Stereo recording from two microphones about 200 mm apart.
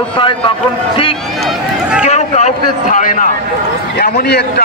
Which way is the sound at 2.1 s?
35° left (ahead or behind).